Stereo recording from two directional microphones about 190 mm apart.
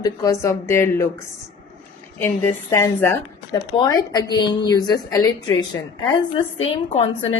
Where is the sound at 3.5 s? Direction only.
25° left (ahead or behind).